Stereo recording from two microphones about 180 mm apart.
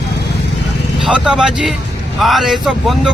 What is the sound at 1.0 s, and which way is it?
Speech, 5° right (ahead or behind).